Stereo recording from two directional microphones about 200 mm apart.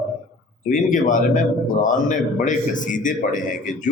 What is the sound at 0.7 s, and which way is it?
Speech, 40° left (ahead or behind).